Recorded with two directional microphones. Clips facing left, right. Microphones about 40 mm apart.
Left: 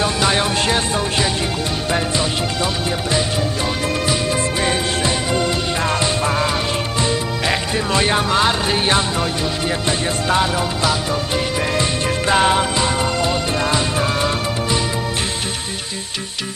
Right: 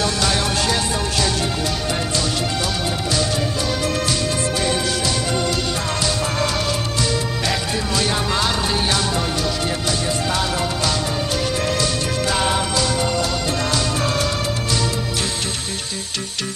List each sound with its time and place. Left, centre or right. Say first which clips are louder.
0.0 s music: left 3 dB; left
11.6 s music: left 2 dB; left